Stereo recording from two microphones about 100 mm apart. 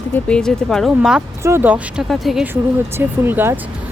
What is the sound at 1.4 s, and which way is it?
Speech, 20° right (ahead or behind).